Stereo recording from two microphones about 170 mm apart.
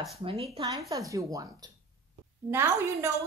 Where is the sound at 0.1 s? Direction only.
35° right (ahead or behind).